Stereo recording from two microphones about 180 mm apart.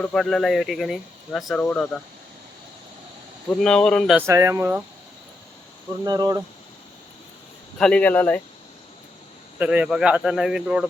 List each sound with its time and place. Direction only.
0.0 s speech: 5° left (ahead or behind)
3.6 s speech: 5° left (ahead or behind)
4.3 s speech: 15° right (ahead or behind)
6.1 s speech: 20° right (ahead or behind)
7.8 s speech: 5° left (ahead or behind)
9.6 s speech: 5° right (ahead or behind)